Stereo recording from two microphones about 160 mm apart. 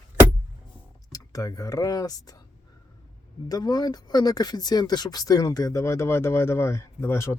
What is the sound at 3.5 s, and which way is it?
Speech, 25° left (ahead or behind).